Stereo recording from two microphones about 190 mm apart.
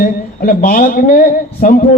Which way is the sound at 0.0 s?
45° left (ahead or behind).